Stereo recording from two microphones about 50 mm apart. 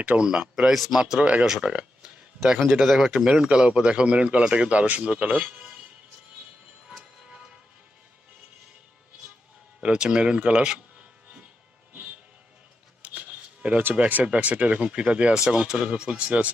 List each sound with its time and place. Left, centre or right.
0.0 s speech: right
0.3 s speech: centre
1.2 s speech: right
1.5 s speech: centre
2.6 s speech: centre; by 5.3 s right
9.8 s speech: centre
13.0 s shuffling cards: right
14.3 s speech: right